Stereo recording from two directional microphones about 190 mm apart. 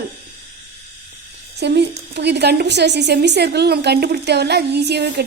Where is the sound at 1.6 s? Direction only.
60° right (ahead or behind).